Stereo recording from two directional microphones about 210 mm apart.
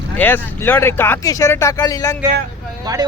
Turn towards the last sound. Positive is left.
turn(degrees=-20)  # may be behind; listen again after turning